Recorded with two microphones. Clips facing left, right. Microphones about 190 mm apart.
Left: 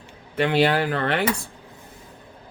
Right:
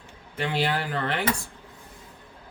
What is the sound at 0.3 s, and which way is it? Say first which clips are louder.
Speech: left 7 dB; 70° left (ahead or behind).